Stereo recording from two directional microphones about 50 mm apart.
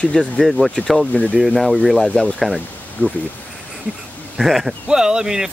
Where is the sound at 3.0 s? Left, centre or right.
Left.